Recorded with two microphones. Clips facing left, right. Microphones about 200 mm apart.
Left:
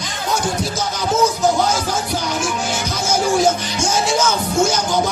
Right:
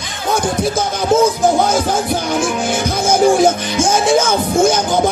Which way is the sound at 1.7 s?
55° right (ahead or behind).